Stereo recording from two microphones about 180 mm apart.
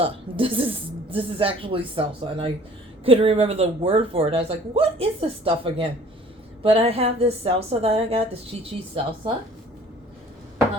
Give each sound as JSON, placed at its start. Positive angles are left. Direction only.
{"t": 0.0, "sound": "a woman's voice", "side_deg": -30}